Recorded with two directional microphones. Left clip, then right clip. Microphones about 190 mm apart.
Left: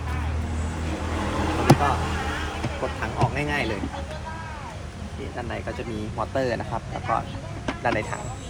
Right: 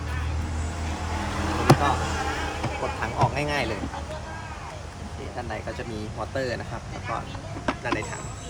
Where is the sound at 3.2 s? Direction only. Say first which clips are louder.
Even; 15° right (ahead or behind).